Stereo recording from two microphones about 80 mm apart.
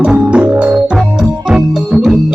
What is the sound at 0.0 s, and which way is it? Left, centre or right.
Organ, centre.